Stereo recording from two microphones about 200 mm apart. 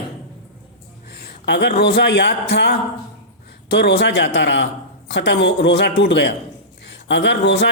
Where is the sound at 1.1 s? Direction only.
60° left (ahead or behind).